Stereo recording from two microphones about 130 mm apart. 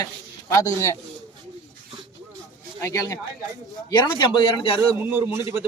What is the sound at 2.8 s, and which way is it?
Speech, 25° left (ahead or behind).